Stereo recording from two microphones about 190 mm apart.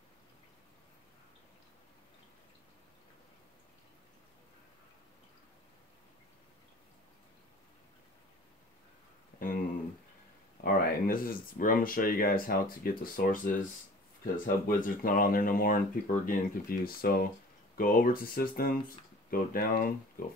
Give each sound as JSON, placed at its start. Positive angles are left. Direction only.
{"t": 10.6, "sound": "speech", "side_deg": 50}